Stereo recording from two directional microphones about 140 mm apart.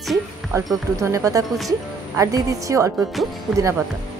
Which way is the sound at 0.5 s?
20° right (ahead or behind).